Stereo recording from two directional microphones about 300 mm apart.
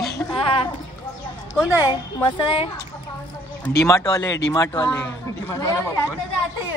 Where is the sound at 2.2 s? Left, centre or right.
Centre.